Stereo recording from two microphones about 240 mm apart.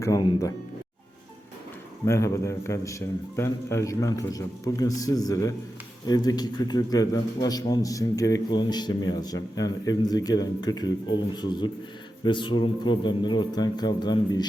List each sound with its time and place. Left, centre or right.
0.0 s a man's voice: centre
2.0 s a man's voice: centre